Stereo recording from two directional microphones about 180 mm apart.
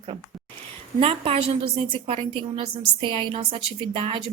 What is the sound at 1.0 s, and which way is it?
A woman's voice, 30° right (ahead or behind).